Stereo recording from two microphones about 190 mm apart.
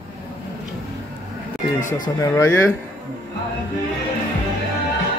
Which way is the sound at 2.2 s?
15° left (ahead or behind).